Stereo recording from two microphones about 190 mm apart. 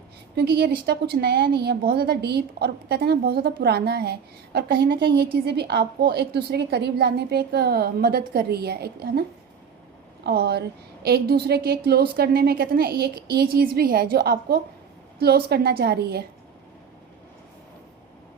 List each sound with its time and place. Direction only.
0.3 s a woman's voice: 55° right (ahead or behind)
10.2 s a woman's voice: 55° right (ahead or behind)